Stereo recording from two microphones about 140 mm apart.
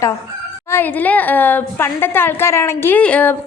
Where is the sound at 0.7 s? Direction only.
15° left (ahead or behind).